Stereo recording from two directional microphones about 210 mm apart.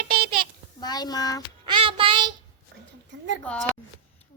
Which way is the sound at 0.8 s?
20° left (ahead or behind).